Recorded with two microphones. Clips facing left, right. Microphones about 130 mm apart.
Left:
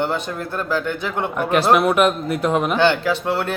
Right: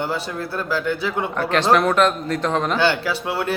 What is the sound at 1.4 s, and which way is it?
A man's voice, 10° left (ahead or behind).